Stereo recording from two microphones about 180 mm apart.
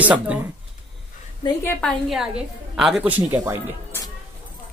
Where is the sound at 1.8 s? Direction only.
Centre (ahead or behind).